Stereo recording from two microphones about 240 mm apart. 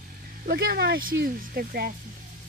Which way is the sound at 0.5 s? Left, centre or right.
Right.